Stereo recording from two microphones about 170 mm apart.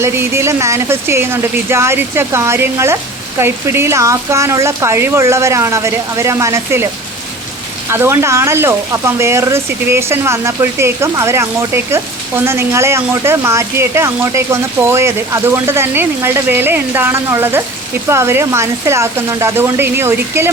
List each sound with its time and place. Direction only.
0.0 s speech: 15° right (ahead or behind)
7.9 s speech: 15° right (ahead or behind)